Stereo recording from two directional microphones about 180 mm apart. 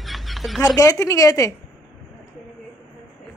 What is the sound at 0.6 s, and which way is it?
Speech, 20° left (ahead or behind).